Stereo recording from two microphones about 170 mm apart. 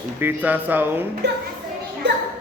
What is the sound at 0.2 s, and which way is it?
Speech, 10° right (ahead or behind).